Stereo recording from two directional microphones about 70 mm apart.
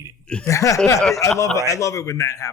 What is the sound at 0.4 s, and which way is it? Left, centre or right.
A man's voice, left.